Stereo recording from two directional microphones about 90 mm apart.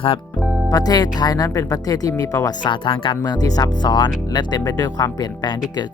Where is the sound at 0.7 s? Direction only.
45° left (ahead or behind).